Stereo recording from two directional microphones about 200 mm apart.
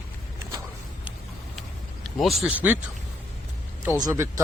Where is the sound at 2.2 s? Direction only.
Centre (ahead or behind).